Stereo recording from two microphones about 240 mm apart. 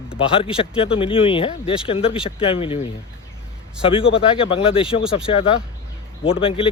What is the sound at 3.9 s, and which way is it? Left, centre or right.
Speech, left.